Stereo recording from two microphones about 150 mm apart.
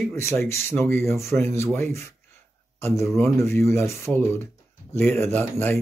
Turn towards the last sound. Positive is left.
turn(degrees=15)  # may be behind; listen again after turning